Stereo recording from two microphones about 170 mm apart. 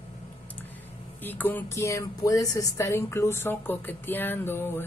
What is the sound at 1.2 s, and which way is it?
A woman's voice, 10° left (ahead or behind).